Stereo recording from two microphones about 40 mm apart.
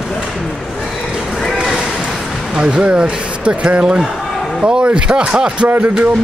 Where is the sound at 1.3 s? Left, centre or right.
Centre.